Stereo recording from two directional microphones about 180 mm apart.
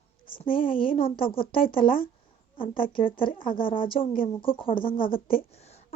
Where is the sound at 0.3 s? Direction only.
30° left (ahead or behind).